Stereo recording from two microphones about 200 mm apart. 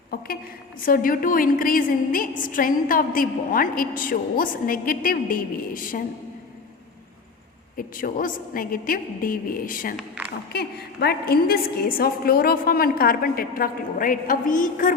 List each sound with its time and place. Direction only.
0.1 s a woman's voice: 50° left (ahead or behind)
7.8 s a woman's voice: 45° left (ahead or behind)
10.0 s a woman's voice: 5° right (ahead or behind)
10.5 s a woman's voice: 55° left (ahead or behind)